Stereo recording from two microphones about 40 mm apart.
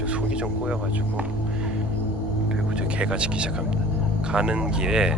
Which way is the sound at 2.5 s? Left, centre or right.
Right.